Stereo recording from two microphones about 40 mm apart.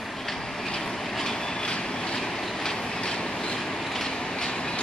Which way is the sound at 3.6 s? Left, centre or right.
Centre.